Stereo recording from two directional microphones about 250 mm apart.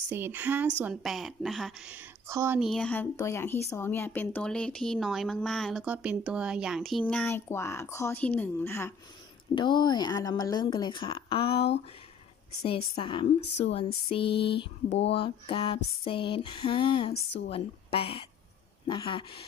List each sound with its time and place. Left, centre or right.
0.1 s a woman's voice: centre; by 11.6 s left
12.6 s female singing: left
14.3 s a sound: left
15.1 s female singing: left